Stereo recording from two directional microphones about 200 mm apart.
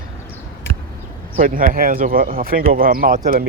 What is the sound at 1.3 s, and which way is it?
Speech, 45° right (ahead or behind).